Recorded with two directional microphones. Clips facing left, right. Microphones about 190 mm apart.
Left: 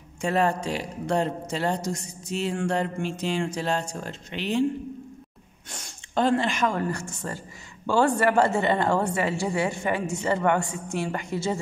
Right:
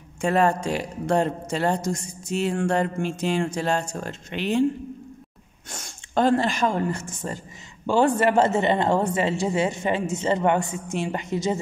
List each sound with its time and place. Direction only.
0.2 s speech: 50° right (ahead or behind)
5.7 s speech: 45° right (ahead or behind)
6.9 s a woman's voice: 20° right (ahead or behind)